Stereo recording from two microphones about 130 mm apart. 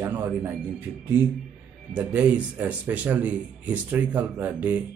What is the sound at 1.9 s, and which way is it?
A man's voice, 10° right (ahead or behind).